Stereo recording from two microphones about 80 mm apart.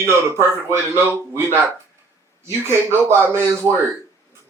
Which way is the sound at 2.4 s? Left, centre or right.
Right.